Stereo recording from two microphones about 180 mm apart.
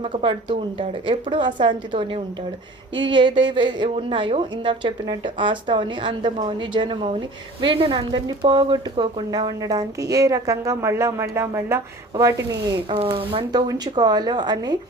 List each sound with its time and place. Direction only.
0.0 s a woman's voice: 30° right (ahead or behind)
13.0 s a woman's voice: 30° right (ahead or behind)